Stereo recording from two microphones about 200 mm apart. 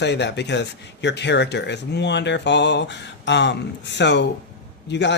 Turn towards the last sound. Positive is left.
turn(degrees=60)  # may be behind; listen again after turning